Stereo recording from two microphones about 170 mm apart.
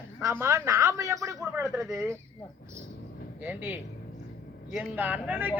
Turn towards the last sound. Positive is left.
turn(degrees=-10)  # may be behind; listen again after turning